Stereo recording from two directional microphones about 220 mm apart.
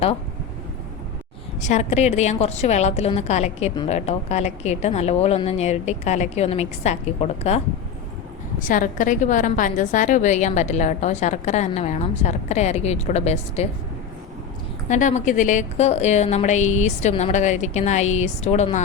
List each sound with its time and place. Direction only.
1.6 s a woman's voice: 30° left (ahead or behind)
14.8 s a woman's voice: 35° left (ahead or behind)